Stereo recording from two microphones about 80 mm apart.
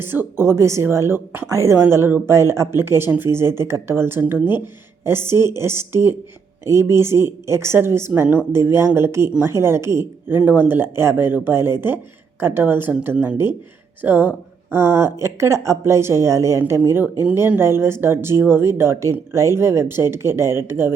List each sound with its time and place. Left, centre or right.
0.0 s speech: right
1.5 s speech: right